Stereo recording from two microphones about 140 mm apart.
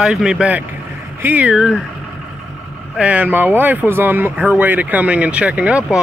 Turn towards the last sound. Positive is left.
turn(degrees=-10)  # may be behind; listen again after turning